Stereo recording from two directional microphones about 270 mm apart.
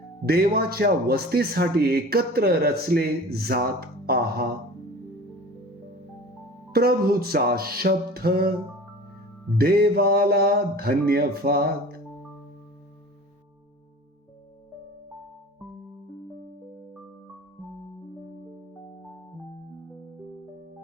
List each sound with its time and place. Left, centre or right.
0.3 s speech: right
6.7 s speech: right
9.6 s speech: right